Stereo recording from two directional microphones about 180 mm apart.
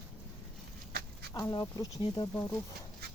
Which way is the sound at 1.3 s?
20° left (ahead or behind).